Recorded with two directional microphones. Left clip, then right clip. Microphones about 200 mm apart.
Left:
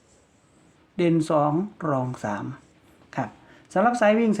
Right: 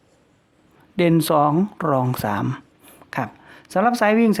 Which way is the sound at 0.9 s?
40° right (ahead or behind).